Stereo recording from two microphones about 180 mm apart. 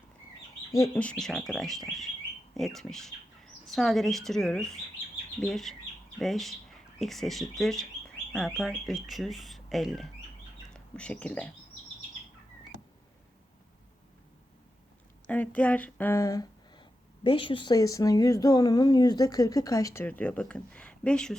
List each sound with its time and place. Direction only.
0.7 s speech: 10° left (ahead or behind)
15.3 s speech: 10° left (ahead or behind)